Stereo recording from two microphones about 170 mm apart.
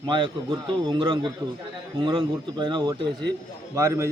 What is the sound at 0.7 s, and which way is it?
A man's voice, 30° right (ahead or behind).